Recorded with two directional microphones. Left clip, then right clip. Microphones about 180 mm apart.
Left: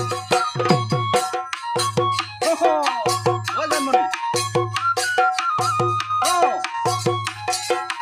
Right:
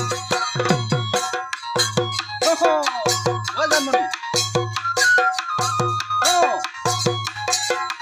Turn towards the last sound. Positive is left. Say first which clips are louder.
# left 1 dB
turn(degrees=-15)  # may be behind; listen again after turning